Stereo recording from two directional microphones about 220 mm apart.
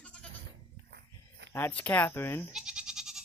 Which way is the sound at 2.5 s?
5° right (ahead or behind).